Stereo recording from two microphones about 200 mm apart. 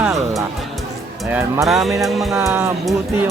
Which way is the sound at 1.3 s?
10° right (ahead or behind).